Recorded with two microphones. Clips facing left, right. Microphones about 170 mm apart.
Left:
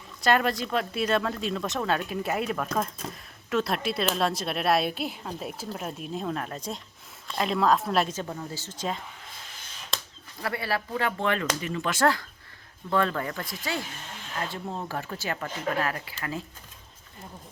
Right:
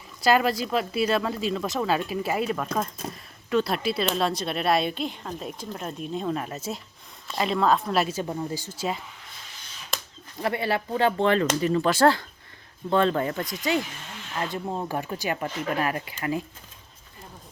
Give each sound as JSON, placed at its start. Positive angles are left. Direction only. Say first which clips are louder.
{"t": 0.2, "sound": "speech", "louder": "right 2 dB", "side_deg": -5}
{"t": 10.4, "sound": "speech", "louder": "right 4 dB", "side_deg": -20}